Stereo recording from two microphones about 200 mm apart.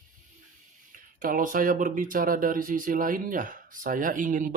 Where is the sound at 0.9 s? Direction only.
45° right (ahead or behind).